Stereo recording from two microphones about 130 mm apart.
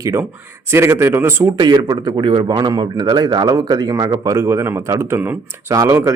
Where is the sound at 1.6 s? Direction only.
35° right (ahead or behind).